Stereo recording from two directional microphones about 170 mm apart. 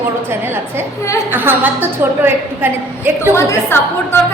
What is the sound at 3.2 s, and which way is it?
A woman's voice, 15° left (ahead or behind).